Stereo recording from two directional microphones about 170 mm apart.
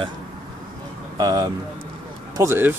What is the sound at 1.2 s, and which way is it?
Speech, 25° right (ahead or behind).